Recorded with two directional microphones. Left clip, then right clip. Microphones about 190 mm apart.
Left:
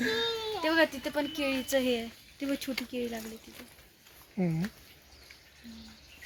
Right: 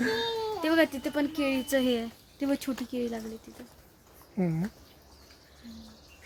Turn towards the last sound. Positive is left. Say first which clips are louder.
# right 2 dB
turn(degrees=0)  # may be behind; listen again after turning